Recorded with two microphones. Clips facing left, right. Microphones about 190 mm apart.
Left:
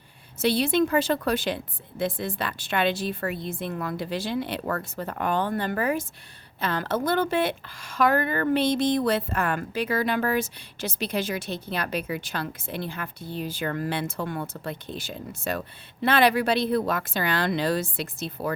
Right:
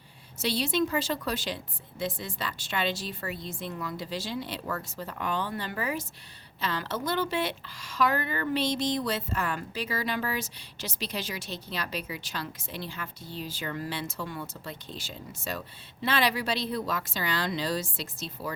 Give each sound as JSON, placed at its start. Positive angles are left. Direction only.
{"t": 0.3, "sound": "speech", "side_deg": 55}